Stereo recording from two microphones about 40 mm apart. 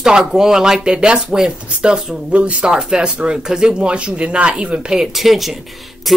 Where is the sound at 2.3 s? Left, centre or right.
Right.